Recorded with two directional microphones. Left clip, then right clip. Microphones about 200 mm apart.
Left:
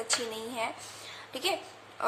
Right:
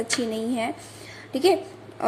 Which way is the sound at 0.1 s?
15° right (ahead or behind).